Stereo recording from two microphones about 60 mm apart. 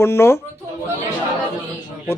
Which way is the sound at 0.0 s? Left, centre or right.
Left.